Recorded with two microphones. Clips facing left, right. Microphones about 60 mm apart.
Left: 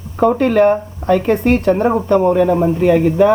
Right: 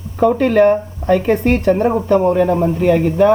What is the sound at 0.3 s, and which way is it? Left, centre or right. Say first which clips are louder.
Speech: right 1 dB; centre.